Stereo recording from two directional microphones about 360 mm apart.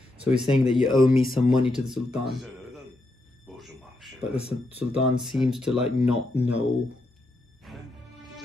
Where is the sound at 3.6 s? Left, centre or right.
Centre.